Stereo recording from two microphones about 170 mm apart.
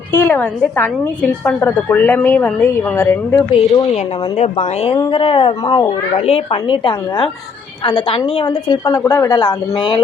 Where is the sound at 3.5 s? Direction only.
35° left (ahead or behind).